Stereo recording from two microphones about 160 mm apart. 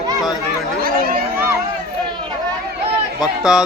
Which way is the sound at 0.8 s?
65° right (ahead or behind).